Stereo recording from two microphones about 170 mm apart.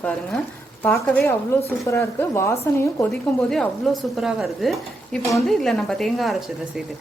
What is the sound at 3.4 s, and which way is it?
A woman's voice, 5° left (ahead or behind).